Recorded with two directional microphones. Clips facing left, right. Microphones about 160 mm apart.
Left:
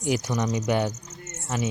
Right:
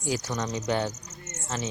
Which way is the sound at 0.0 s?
20° left (ahead or behind).